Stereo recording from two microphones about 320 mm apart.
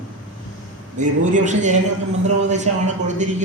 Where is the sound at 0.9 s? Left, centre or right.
Right.